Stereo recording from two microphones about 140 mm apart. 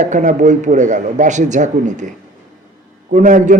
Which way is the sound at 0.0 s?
60° right (ahead or behind).